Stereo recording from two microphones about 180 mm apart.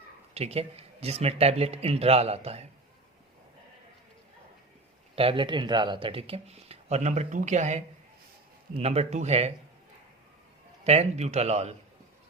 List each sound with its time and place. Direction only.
0.3 s speech: 35° right (ahead or behind)
5.1 s speech: 30° right (ahead or behind)
10.8 s speech: 35° right (ahead or behind)